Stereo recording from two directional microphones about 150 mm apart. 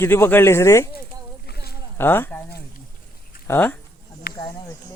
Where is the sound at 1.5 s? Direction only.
90° left.